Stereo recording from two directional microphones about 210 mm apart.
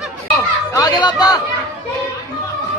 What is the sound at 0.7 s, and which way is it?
Chatter, 20° left (ahead or behind).